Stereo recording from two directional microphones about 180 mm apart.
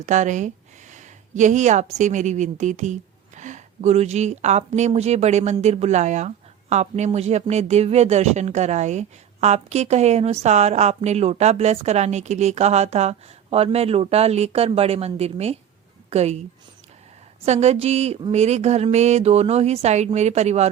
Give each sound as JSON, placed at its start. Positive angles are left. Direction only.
{"t": 0.0, "sound": "a woman's voice", "side_deg": -40}
{"t": 17.4, "sound": "speech", "side_deg": -35}